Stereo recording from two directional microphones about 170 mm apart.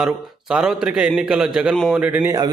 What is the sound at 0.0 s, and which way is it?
A man's voice, 5° right (ahead or behind).